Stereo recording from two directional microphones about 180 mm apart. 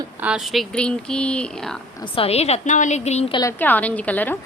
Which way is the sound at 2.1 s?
35° left (ahead or behind).